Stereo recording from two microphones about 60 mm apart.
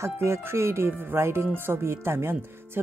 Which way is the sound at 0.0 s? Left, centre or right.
Right.